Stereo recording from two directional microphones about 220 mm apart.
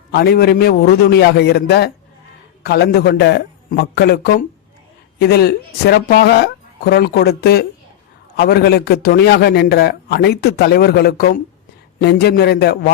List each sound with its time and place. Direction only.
0.1 s a man's voice: 45° left (ahead or behind)